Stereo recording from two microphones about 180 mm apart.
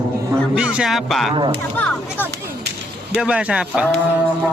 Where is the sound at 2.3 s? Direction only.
65° right (ahead or behind).